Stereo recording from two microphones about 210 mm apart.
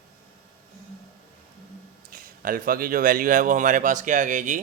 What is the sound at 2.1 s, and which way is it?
A man's voice, 40° right (ahead or behind).